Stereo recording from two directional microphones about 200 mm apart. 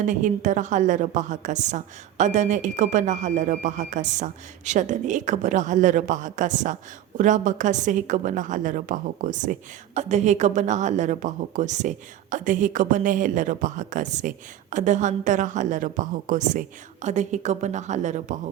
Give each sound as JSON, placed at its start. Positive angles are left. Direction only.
{"t": 0.0, "sound": "a woman's voice", "side_deg": -40}